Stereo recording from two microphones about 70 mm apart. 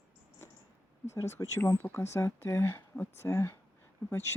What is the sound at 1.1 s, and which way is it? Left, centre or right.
Speech, left.